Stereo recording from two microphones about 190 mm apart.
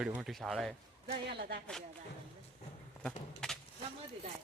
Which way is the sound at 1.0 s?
55° right (ahead or behind).